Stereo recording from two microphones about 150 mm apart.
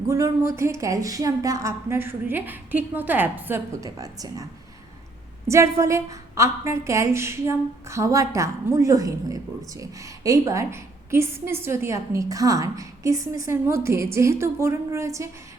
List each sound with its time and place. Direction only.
0.1 s a woman's voice: 20° right (ahead or behind)
5.5 s a woman's voice: 20° right (ahead or behind)